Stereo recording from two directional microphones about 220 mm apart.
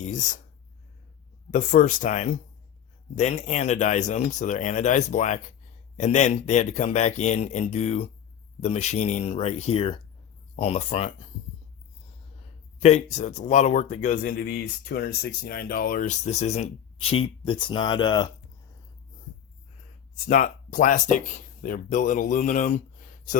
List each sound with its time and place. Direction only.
0.0 s speech: 35° left (ahead or behind)
1.5 s speech: 35° left (ahead or behind)
13.1 s speech: 35° left (ahead or behind)
20.2 s speech: 35° left (ahead or behind)